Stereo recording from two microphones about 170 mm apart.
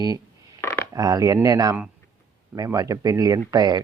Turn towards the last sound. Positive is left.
turn(degrees=-25)  # may be behind; listen again after turning